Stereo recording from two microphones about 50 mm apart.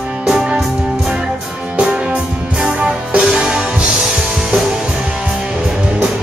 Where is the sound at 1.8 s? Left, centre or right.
Centre.